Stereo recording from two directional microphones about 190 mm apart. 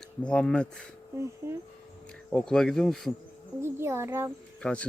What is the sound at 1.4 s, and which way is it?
Speech, 15° right (ahead or behind).